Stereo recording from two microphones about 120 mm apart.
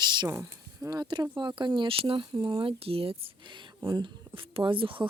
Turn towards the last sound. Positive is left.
turn(degrees=-45)  # may be behind; listen again after turning